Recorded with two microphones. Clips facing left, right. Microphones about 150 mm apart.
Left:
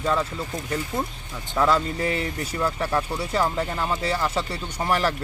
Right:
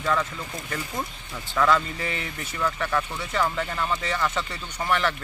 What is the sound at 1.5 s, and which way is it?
Speech, 25° left (ahead or behind).